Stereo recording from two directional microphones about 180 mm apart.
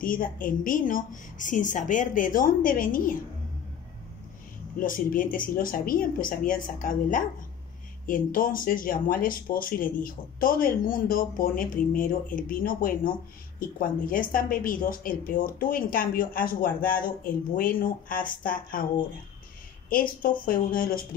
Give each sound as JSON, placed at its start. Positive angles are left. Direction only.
{"t": 0.0, "sound": "a woman's voice", "side_deg": 50}
{"t": 4.7, "sound": "a woman's voice", "side_deg": 50}
{"t": 19.9, "sound": "a woman's voice", "side_deg": 50}